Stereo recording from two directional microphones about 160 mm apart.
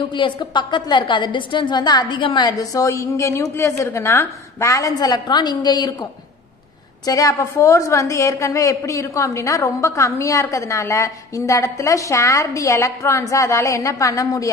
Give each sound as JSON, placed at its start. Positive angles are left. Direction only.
{"t": 0.1, "sound": "a woman's voice", "side_deg": 30}
{"t": 7.1, "sound": "a woman's voice", "side_deg": 20}